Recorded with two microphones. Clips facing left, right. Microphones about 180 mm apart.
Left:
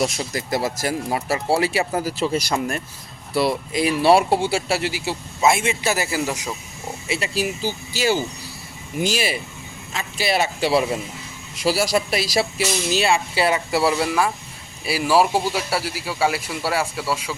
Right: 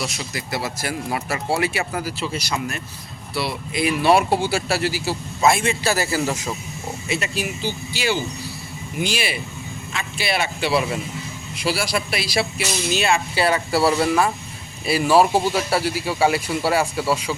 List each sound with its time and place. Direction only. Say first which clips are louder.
0.0 s speech: left 5 dB; 45° left (ahead or behind)
2.3 s speech: left 4 dB; 50° left (ahead or behind); by 6.5 s 15° left (ahead or behind)
7.1 s speech: left 2 dB; 35° left (ahead or behind)
13.1 s speech: even; 25° left (ahead or behind); by 17.3 s centre (ahead or behind)